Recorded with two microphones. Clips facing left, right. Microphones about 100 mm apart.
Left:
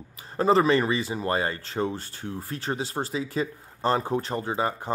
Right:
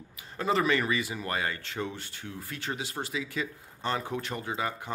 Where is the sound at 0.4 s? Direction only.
35° left (ahead or behind).